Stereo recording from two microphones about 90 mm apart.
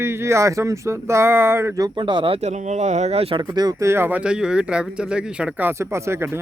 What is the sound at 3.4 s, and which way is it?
Speech, 50° right (ahead or behind).